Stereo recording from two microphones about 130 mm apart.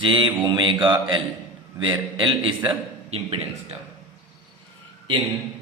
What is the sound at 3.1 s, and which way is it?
Speech, 50° right (ahead or behind).